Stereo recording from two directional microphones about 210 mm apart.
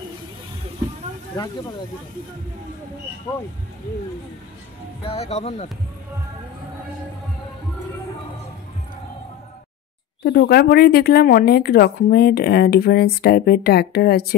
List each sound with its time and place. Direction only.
5.0 s speech: 30° left (ahead or behind)
10.2 s speech: 50° left (ahead or behind)